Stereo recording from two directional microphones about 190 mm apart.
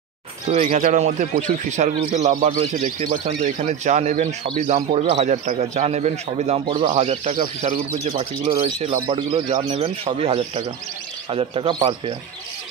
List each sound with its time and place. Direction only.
0.5 s a man's voice: 35° right (ahead or behind)